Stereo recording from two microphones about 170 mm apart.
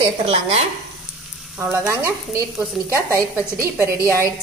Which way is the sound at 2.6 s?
5° right (ahead or behind).